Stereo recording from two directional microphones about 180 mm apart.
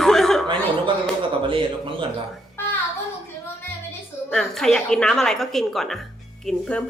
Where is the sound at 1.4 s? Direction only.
30° right (ahead or behind).